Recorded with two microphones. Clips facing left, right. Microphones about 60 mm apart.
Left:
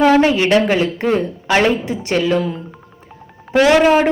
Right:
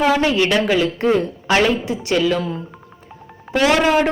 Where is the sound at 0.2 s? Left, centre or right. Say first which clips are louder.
Left 4 dB; left.